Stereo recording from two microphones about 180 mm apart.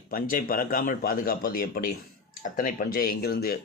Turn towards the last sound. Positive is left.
turn(degrees=55)  # may be behind; listen again after turning